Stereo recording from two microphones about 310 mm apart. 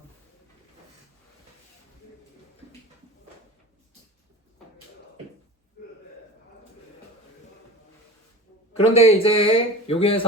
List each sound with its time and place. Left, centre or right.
8.8 s a man's voice: centre